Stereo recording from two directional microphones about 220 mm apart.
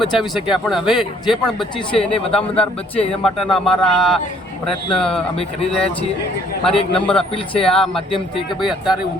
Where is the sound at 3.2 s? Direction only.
5° left (ahead or behind).